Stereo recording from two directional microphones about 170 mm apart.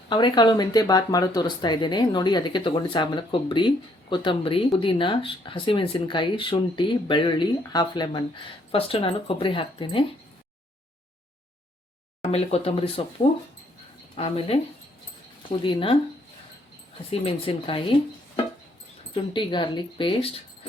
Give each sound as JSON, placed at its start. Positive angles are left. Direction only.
{"t": 0.1, "sound": "speech", "side_deg": 25}
{"t": 12.2, "sound": "speech", "side_deg": 35}
{"t": 14.2, "sound": "speech", "side_deg": 35}
{"t": 17.1, "sound": "speech", "side_deg": 30}
{"t": 19.1, "sound": "speech", "side_deg": 30}